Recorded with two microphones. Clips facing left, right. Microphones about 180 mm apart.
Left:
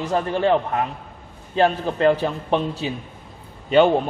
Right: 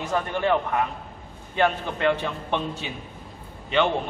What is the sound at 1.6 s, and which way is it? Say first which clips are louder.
A man's voice: left 5 dB; 35° left (ahead or behind).